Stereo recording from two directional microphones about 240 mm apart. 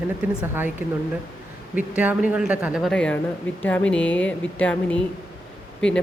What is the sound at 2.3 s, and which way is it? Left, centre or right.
A woman's voice, centre.